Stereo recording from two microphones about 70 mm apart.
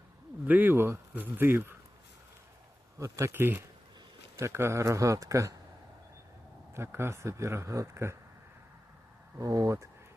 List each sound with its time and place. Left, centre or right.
0.4 s speech: right
3.0 s speech: right
6.7 s speech: right
9.4 s speech: right